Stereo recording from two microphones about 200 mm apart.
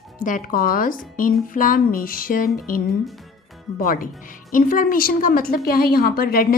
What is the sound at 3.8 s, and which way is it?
A woman's voice, 45° left (ahead or behind).